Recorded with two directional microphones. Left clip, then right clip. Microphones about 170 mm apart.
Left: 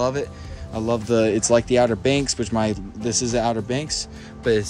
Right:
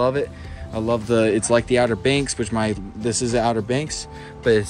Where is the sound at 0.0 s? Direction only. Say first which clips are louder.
Right 3 dB; 15° left (ahead or behind).